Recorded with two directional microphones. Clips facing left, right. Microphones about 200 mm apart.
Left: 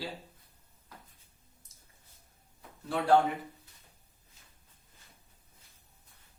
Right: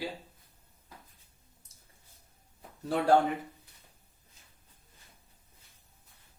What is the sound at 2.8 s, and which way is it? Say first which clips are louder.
Speech: right 4 dB; 40° right (ahead or behind).